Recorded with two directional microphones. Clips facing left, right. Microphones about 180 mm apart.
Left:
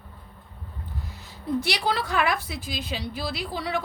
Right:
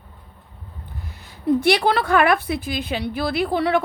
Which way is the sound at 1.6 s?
60° right (ahead or behind).